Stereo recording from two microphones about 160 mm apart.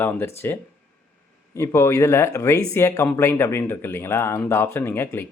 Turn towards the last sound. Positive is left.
turn(degrees=15)  # may be behind; listen again after turning